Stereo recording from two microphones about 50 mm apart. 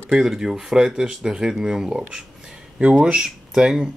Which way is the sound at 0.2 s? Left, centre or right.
Centre.